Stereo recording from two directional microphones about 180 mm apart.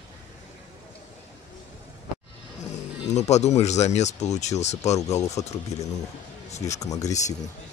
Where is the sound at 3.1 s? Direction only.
40° left (ahead or behind).